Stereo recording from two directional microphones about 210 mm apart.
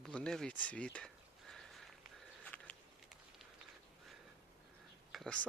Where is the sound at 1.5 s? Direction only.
Centre (ahead or behind).